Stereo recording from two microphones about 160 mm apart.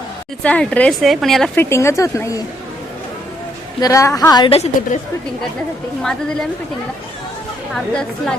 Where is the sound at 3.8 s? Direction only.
20° left (ahead or behind).